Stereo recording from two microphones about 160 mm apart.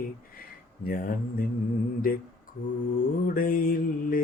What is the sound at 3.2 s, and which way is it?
Mantra, 60° left (ahead or behind).